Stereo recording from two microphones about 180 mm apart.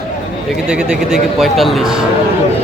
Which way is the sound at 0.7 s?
5° right (ahead or behind).